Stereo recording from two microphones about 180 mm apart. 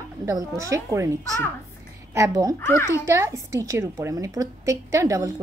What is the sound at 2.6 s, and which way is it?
Speech, 15° left (ahead or behind).